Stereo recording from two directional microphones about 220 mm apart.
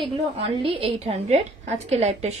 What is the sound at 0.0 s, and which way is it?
A woman's voice, 25° right (ahead or behind).